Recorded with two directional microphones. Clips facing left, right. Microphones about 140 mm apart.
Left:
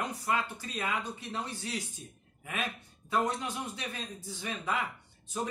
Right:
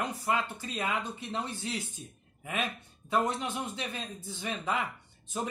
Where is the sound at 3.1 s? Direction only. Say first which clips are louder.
Right 1 dB; 25° right (ahead or behind).